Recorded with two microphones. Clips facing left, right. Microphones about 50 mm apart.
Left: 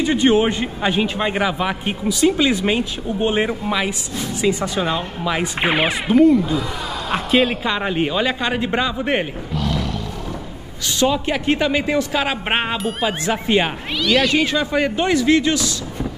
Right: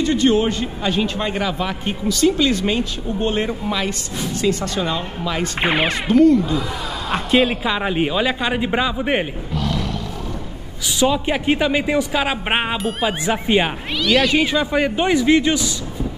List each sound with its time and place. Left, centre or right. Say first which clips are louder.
0.0 s a man's voice: left 1 dB; centre
5.6 s a man's voice: right 1 dB; centre
14.3 s a man's voice: right 1 dB; centre